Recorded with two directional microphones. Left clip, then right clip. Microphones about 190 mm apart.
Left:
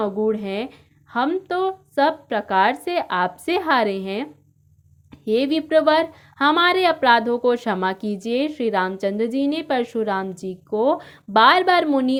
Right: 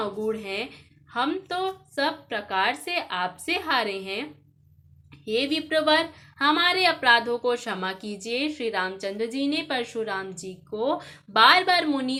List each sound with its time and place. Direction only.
0.0 s a woman's voice: 40° left (ahead or behind)